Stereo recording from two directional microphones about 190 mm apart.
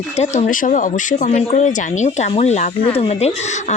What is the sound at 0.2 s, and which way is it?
Speech, 40° left (ahead or behind).